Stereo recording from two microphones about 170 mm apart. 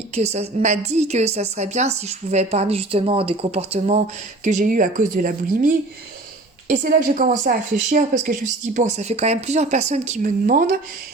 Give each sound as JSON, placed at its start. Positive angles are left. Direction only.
{"t": 0.1, "sound": "a woman's voice", "side_deg": -40}